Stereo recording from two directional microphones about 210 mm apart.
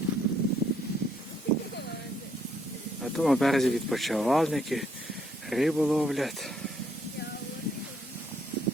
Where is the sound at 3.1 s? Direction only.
Centre (ahead or behind).